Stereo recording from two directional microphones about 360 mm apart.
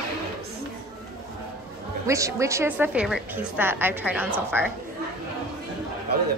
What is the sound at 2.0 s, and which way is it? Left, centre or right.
A woman's voice, centre.